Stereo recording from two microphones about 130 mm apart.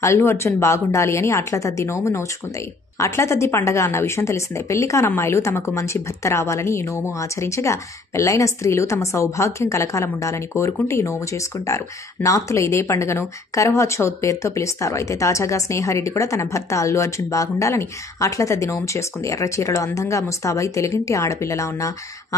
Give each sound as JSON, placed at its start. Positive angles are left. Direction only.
{"t": 0.0, "sound": "a woman's voice", "side_deg": 20}